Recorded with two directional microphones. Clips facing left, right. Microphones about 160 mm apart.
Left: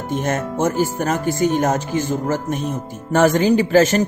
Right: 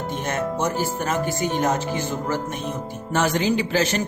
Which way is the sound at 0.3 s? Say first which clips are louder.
Left 3 dB; 45° left (ahead or behind).